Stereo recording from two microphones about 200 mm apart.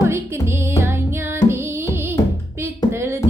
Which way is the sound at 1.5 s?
10° right (ahead or behind).